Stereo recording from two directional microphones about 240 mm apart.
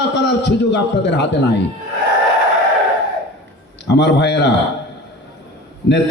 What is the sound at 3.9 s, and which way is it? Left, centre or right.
Speech, left.